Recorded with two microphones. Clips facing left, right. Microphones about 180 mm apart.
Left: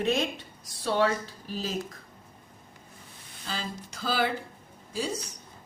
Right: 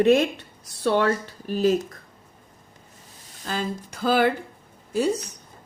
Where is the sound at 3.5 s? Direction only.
50° right (ahead or behind).